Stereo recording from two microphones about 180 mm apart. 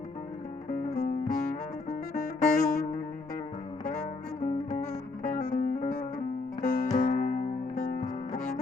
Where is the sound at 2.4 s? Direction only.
40° left (ahead or behind).